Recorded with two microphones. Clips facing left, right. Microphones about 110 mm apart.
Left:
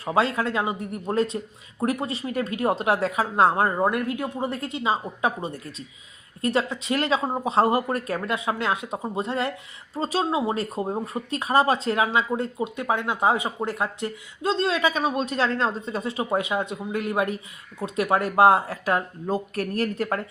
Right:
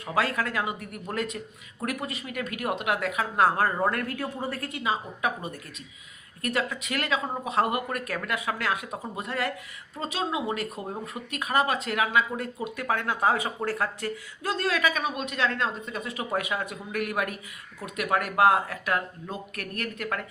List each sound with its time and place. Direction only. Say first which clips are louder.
0.0 s speech: left 4 dB; 25° left (ahead or behind)